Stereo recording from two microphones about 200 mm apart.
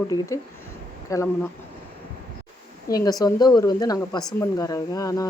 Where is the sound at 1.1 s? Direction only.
15° left (ahead or behind).